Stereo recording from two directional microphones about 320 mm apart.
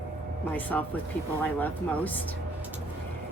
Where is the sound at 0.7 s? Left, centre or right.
Centre.